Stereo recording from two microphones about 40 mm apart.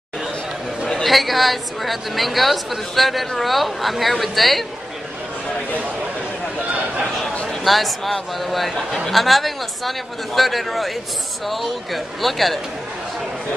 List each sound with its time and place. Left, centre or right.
1.0 s a woman's voice: centre
6.7 s a sound: right
7.4 s a woman's voice: centre